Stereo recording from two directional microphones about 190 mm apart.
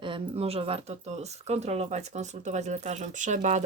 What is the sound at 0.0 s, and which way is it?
Speech, 30° right (ahead or behind).